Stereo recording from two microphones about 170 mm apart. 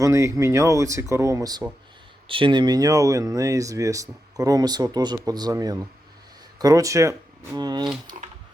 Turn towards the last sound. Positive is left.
turn(degrees=-25)  # may be behind; listen again after turning